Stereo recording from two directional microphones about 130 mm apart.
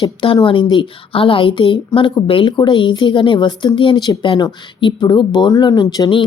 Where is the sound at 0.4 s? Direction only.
40° left (ahead or behind).